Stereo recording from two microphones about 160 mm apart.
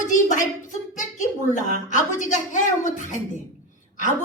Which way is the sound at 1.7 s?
50° left (ahead or behind).